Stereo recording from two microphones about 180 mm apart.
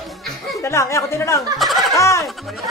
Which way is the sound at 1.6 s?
Centre (ahead or behind).